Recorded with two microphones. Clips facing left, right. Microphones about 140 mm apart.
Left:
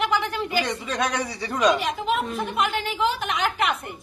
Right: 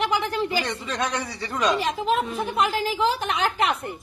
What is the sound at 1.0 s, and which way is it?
Speech, 10° left (ahead or behind).